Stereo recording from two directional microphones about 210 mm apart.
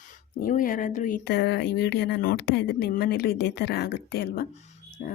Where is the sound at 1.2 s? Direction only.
55° left (ahead or behind).